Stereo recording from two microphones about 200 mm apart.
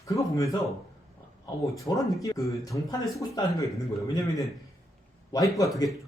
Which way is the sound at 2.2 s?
15° left (ahead or behind).